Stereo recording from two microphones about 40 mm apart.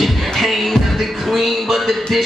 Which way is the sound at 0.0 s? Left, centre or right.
Centre.